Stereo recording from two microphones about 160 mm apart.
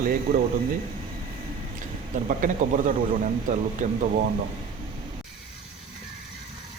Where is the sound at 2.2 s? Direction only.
55° right (ahead or behind).